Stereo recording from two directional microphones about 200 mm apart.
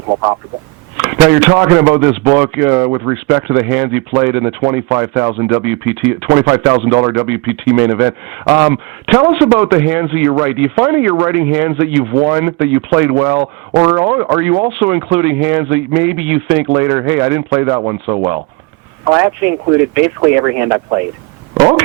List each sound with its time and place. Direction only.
0.1 s speech: 20° right (ahead or behind)